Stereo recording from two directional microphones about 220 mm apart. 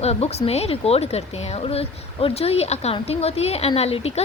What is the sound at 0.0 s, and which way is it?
Speech, 30° left (ahead or behind).